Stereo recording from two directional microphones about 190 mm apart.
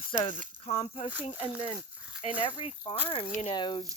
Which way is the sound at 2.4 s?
25° left (ahead or behind).